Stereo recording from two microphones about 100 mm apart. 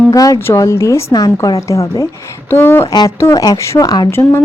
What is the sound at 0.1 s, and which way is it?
A woman's voice, 35° left (ahead or behind).